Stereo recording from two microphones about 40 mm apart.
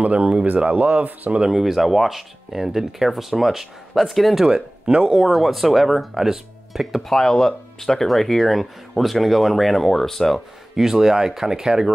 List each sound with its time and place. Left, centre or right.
0.0 s speech: right
0.5 s speech: right
1.5 s speech: centre
4.5 s speech: right
5.2 s speech: centre
7.0 s speech: centre
10.8 s speech: centre